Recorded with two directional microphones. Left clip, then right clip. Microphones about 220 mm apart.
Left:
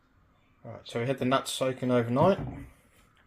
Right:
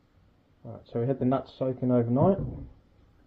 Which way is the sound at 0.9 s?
15° left (ahead or behind).